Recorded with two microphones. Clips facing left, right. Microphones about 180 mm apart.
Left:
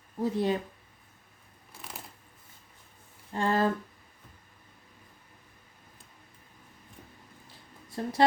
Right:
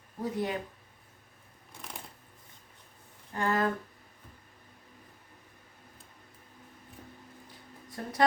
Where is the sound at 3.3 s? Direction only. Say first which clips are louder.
Left 2 dB; 30° left (ahead or behind).